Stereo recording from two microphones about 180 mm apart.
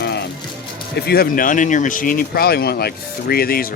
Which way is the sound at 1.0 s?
60° left (ahead or behind).